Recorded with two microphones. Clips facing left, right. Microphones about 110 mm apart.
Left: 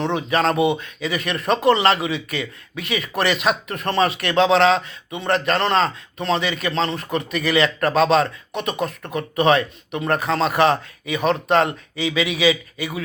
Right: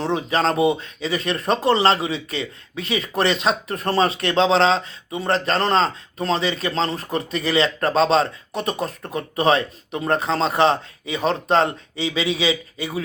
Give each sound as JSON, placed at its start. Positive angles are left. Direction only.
{"t": 0.0, "sound": "speech", "side_deg": -30}